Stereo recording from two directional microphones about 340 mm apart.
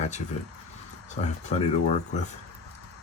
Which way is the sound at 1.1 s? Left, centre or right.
Centre.